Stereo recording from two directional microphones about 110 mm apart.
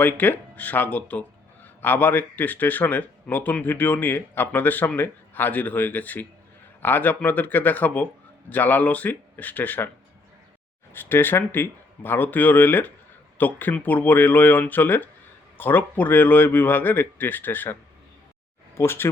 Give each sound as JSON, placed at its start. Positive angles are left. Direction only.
{"t": 0.0, "sound": "speech", "side_deg": 15}
{"t": 10.9, "sound": "speech", "side_deg": 20}